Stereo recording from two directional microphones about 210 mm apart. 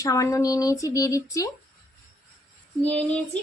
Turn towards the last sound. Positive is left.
turn(degrees=5)  # may be behind; listen again after turning